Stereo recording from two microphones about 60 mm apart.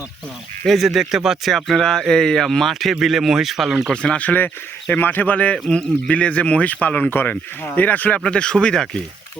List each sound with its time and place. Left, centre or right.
0.6 s speech: centre
3.8 s speech: centre
7.1 s speech: left
8.2 s speech: centre